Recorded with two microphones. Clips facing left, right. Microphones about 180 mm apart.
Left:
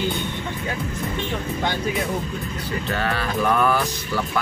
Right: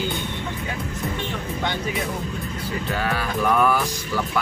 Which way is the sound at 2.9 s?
5° right (ahead or behind).